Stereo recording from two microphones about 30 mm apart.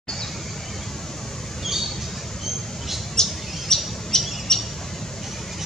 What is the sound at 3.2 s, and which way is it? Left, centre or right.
Bird, centre.